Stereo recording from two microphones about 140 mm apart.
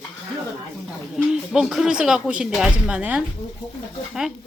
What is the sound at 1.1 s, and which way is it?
Speech, 5° right (ahead or behind).